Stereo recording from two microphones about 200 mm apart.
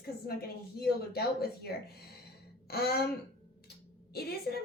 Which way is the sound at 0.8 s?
50° left (ahead or behind).